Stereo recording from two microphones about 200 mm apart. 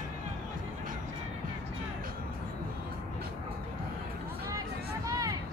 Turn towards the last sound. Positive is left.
turn(degrees=-15)  # may be behind; listen again after turning